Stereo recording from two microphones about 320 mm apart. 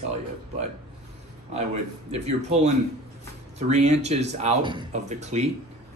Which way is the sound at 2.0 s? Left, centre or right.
Centre.